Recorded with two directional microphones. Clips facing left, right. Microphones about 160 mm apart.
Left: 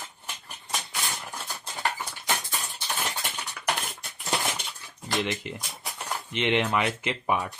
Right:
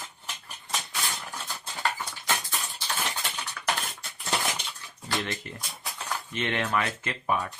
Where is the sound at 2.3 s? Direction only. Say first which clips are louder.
Even; 15° left (ahead or behind).